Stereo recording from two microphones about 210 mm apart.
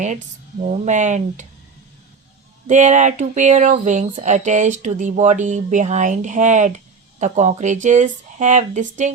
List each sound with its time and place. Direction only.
0.6 s speech: 35° right (ahead or behind)
2.6 s speech: 35° right (ahead or behind)